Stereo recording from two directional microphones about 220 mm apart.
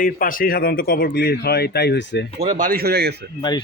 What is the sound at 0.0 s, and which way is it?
Speech, 40° left (ahead or behind).